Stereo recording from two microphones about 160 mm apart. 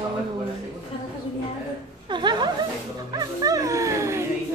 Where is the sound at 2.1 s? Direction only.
30° right (ahead or behind).